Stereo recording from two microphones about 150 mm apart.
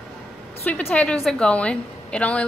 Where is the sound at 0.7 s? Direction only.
10° left (ahead or behind).